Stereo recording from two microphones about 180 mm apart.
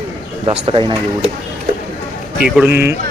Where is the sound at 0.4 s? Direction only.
30° right (ahead or behind).